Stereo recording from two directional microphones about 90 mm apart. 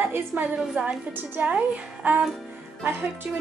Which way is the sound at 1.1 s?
15° right (ahead or behind).